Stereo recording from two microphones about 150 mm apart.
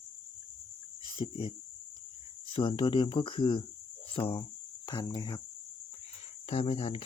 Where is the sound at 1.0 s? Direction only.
35° left (ahead or behind).